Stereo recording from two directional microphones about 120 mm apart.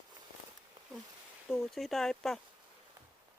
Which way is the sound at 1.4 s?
Centre (ahead or behind).